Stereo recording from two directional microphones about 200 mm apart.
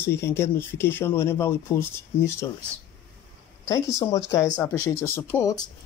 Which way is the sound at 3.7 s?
15° left (ahead or behind).